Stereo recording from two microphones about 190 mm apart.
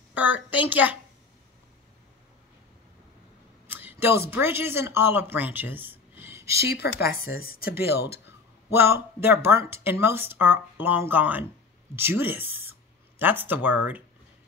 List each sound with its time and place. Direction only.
0.1 s a woman's voice: 10° right (ahead or behind)
3.6 s speech: 10° right (ahead or behind)
6.7 s speech: 55° left (ahead or behind)
8.7 s speech: 10° right (ahead or behind)